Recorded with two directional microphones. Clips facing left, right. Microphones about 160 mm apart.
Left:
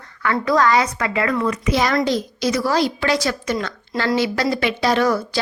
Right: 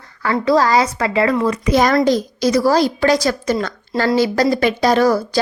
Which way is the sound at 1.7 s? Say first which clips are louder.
Right 6 dB; 45° right (ahead or behind).